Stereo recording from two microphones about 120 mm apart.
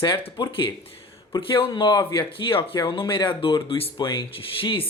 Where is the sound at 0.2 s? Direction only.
55° left (ahead or behind).